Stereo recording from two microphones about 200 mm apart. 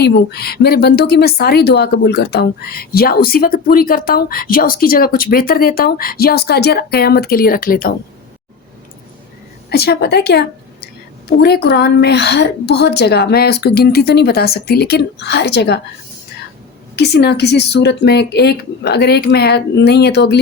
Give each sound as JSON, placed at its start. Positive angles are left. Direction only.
{"t": 0.0, "sound": "speech", "side_deg": 55}
{"t": 9.6, "sound": "a woman's voice", "side_deg": 55}
{"t": 16.9, "sound": "a woman's voice", "side_deg": 55}